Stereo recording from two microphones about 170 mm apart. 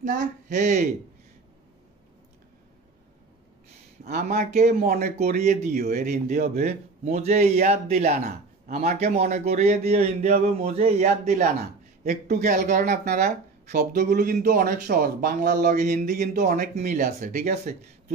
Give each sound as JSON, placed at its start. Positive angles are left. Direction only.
{"t": 0.0, "sound": "speech", "side_deg": -45}
{"t": 4.3, "sound": "speech", "side_deg": -45}
{"t": 4.8, "sound": "speech", "side_deg": -60}
{"t": 5.1, "sound": "speech", "side_deg": -40}
{"t": 6.5, "sound": "a man's voice", "side_deg": -40}